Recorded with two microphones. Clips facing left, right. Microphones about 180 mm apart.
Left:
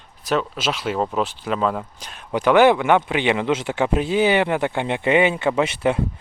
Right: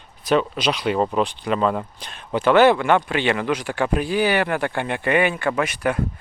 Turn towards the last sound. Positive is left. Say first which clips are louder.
# left 2 dB
turn(degrees=25)  # may be behind; listen again after turning